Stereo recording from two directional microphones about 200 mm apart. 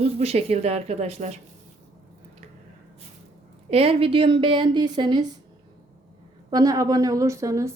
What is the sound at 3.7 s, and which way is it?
Speech, 30° right (ahead or behind).